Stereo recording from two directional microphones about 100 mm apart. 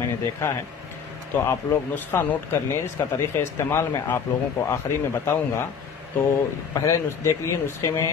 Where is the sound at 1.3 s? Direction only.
20° left (ahead or behind).